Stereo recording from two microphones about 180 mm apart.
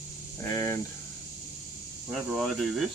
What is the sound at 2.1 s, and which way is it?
Speech, centre (ahead or behind).